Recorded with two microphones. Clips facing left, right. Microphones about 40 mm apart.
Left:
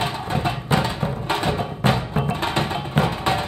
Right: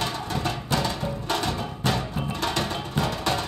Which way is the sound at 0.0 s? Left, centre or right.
Left.